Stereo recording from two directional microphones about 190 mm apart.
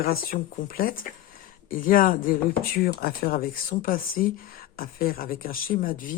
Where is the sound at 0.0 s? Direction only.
50° left (ahead or behind).